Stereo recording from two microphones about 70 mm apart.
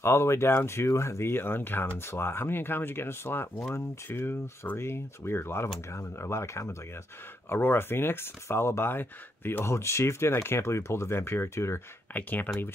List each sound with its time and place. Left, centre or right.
0.0 s speech: left
12.1 s speech: left